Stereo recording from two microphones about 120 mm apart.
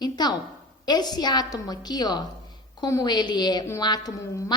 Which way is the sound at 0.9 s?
35° left (ahead or behind).